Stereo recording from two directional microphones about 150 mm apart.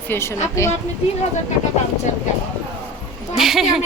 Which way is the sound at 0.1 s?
15° left (ahead or behind).